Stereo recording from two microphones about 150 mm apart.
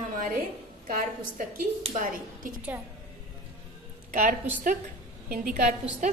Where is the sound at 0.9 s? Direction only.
65° right (ahead or behind).